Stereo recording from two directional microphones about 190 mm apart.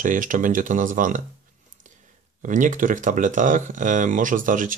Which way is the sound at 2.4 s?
40° right (ahead or behind).